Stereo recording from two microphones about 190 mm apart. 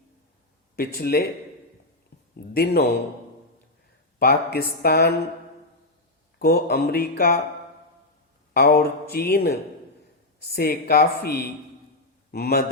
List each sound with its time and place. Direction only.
0.8 s speech: 50° left (ahead or behind)
2.3 s speech: 55° left (ahead or behind)
4.2 s speech: 50° left (ahead or behind)
6.4 s speech: 55° left (ahead or behind)
8.5 s speech: 55° left (ahead or behind)